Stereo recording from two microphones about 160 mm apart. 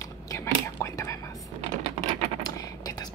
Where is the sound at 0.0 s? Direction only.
20° left (ahead or behind).